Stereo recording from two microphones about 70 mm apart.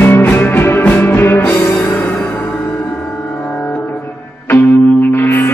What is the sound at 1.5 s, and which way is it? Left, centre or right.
Music, left.